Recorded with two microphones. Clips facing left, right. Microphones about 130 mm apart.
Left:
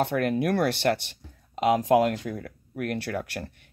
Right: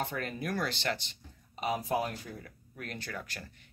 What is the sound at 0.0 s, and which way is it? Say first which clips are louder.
Speech: left 11 dB; 65° left (ahead or behind).